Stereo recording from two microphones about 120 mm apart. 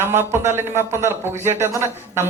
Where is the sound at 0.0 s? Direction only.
20° right (ahead or behind).